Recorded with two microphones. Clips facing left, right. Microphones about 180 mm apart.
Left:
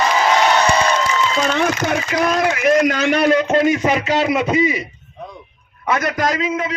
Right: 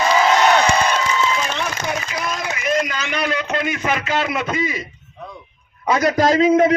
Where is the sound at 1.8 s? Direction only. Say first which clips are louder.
Left 6 dB; 65° left (ahead or behind); by 3.7 s 40° left (ahead or behind).